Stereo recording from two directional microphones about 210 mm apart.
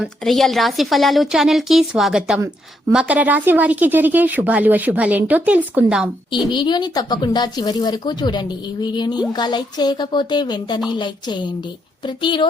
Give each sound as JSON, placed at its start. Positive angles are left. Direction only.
{"t": 0.0, "sound": "a woman's voice", "side_deg": 0}
{"t": 6.5, "sound": "speech", "side_deg": 20}